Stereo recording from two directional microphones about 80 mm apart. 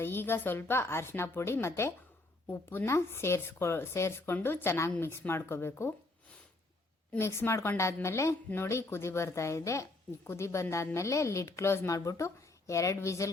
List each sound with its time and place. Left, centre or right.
0.0 s a woman's voice: left
7.2 s speech: left
11.9 s speech: left